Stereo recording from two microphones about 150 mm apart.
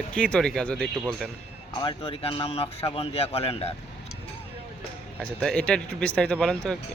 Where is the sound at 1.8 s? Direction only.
35° left (ahead or behind).